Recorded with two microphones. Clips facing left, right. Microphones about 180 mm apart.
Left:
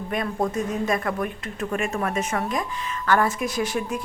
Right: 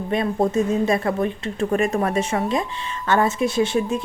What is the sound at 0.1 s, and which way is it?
Speech, 25° right (ahead or behind).